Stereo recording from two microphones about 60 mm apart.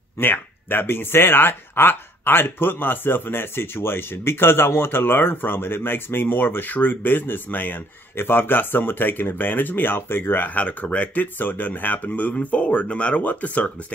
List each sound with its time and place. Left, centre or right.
0.2 s speech: left